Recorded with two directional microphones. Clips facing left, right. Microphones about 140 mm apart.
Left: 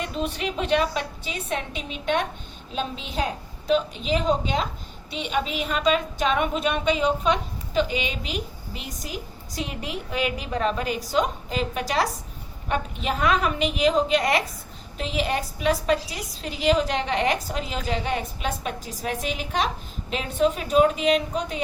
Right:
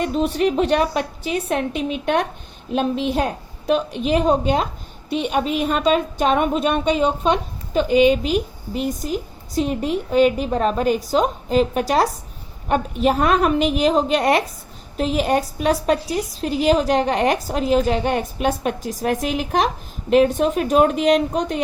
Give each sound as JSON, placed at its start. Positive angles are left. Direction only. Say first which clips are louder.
{"t": 0.0, "sound": "a woman's voice", "louder": "right 9 dB", "side_deg": -45}
{"t": 7.7, "sound": "a woman's voice", "louder": "right 10 dB", "side_deg": -50}